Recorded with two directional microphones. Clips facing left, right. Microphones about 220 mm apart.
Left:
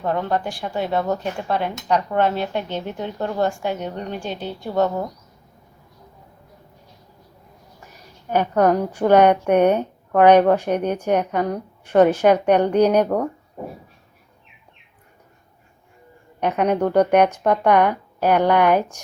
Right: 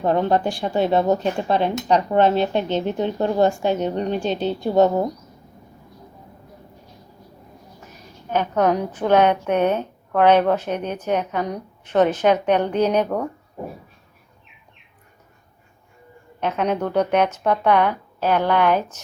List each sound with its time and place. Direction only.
0.0 s speech: 25° right (ahead or behind)
8.3 s a woman's voice: 10° left (ahead or behind)
16.4 s a woman's voice: 15° left (ahead or behind)